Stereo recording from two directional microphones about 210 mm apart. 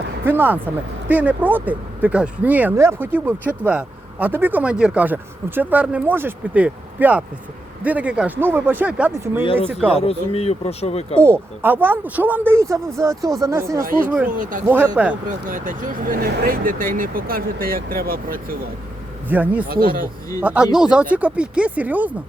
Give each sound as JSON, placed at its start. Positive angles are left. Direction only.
{"t": 0.3, "sound": "speech", "side_deg": -10}
{"t": 9.4, "sound": "speech", "side_deg": 25}
{"t": 11.2, "sound": "speech", "side_deg": -10}
{"t": 13.8, "sound": "speech", "side_deg": -40}
{"t": 14.7, "sound": "speech", "side_deg": -10}
{"t": 15.4, "sound": "speech", "side_deg": -40}
{"t": 19.3, "sound": "speech", "side_deg": -10}
{"t": 19.6, "sound": "speech", "side_deg": -45}
{"t": 20.4, "sound": "speech", "side_deg": -5}